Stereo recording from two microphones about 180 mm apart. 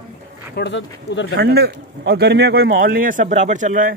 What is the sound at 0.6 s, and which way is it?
Speech, 85° left.